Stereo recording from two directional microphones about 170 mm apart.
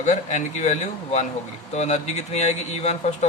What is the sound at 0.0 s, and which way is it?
Speech, 45° left (ahead or behind).